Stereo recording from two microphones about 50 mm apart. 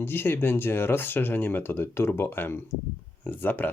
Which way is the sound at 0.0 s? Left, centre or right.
Left.